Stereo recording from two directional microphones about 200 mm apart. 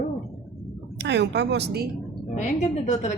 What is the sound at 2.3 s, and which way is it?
Speech, 35° left (ahead or behind).